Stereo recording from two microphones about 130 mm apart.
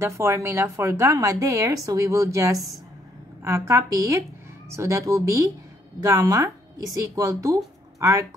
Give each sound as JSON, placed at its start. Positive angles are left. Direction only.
{"t": 0.0, "sound": "a woman's voice", "side_deg": -20}